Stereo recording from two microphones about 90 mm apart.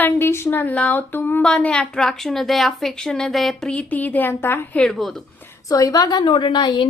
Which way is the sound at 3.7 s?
15° left (ahead or behind).